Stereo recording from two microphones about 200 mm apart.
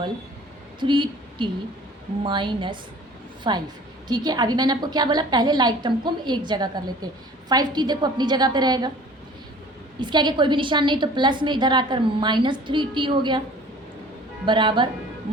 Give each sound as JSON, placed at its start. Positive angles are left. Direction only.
{"t": 0.8, "sound": "a woman's voice", "side_deg": -25}
{"t": 10.0, "sound": "a woman's voice", "side_deg": -20}
{"t": 14.4, "sound": "a woman's voice", "side_deg": -25}